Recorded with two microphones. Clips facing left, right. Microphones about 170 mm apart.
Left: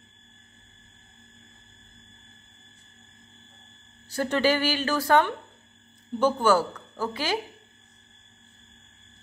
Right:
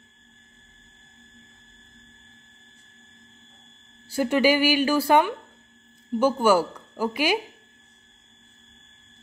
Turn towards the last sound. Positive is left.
turn(degrees=-10)  # may be behind; listen again after turning